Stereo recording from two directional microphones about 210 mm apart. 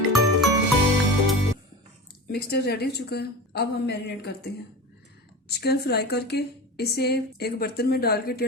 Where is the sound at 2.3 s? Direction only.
50° left (ahead or behind).